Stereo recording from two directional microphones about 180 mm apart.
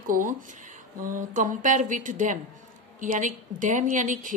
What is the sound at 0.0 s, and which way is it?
A woman's voice, 50° right (ahead or behind).